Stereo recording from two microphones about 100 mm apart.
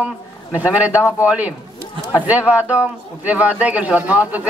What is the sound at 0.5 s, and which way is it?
Speech, 15° right (ahead or behind).